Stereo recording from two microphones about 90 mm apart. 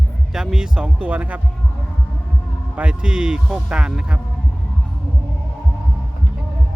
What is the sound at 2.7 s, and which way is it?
Speech, 10° right (ahead or behind).